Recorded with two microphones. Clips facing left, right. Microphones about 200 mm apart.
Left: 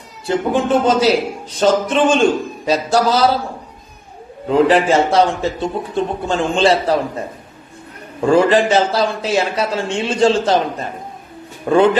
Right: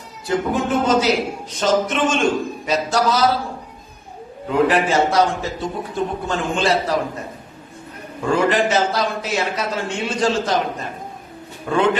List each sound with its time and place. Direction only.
0.3 s a man's voice: 30° left (ahead or behind)
1.6 s a sound: 30° left (ahead or behind)
4.4 s a man's voice: 30° left (ahead or behind)
8.3 s a man's voice: 30° left (ahead or behind)
11.7 s a man's voice: 30° left (ahead or behind)